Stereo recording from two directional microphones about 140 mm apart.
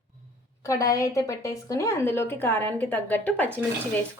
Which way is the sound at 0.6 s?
25° left (ahead or behind).